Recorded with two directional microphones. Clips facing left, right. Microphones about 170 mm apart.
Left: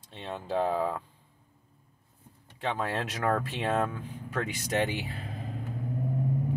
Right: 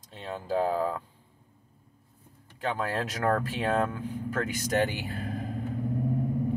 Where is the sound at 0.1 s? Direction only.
Centre (ahead or behind).